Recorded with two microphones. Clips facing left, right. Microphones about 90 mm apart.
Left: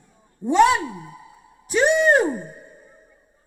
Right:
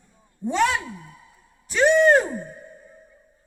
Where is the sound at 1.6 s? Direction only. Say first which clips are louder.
Right 1 dB; 15° left (ahead or behind).